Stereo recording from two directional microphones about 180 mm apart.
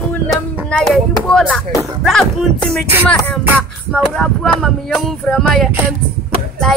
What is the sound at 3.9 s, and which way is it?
Speech, centre (ahead or behind).